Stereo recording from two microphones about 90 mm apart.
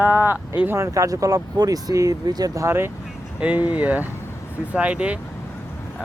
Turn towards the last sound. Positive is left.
turn(degrees=-15)  # may be behind; listen again after turning